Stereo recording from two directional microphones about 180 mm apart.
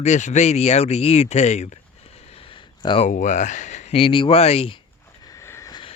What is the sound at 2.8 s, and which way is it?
Speech, 25° left (ahead or behind).